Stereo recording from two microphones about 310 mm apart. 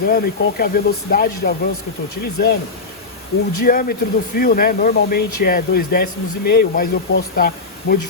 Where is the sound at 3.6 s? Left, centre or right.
Left.